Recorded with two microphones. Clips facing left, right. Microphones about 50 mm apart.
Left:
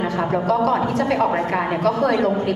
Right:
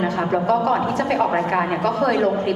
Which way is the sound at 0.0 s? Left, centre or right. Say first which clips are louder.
Right 1 dB; centre.